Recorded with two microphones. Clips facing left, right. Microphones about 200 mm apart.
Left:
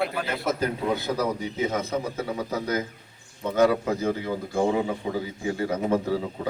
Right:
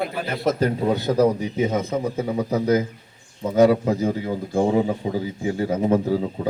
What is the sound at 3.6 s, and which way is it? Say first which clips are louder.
Speech: right 4 dB; 15° right (ahead or behind).